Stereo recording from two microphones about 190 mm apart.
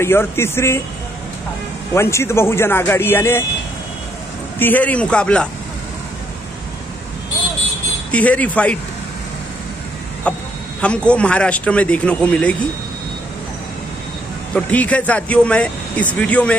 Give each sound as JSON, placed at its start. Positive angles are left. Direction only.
{"t": 0.0, "sound": "speech", "side_deg": 15}
{"t": 2.0, "sound": "speech", "side_deg": 15}
{"t": 4.6, "sound": "speech", "side_deg": 10}
{"t": 8.1, "sound": "speech", "side_deg": 5}
{"t": 10.3, "sound": "a sound", "side_deg": 5}
{"t": 10.8, "sound": "speech", "side_deg": 5}
{"t": 14.5, "sound": "speech", "side_deg": 5}